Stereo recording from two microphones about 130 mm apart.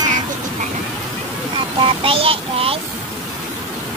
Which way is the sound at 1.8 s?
45° right (ahead or behind).